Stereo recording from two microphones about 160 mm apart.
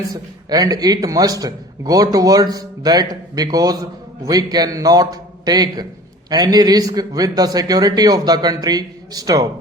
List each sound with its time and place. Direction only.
0.1 s a man's voice: 25° right (ahead or behind)